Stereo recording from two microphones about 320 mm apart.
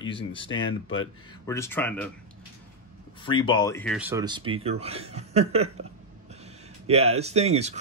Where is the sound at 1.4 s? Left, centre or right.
Centre.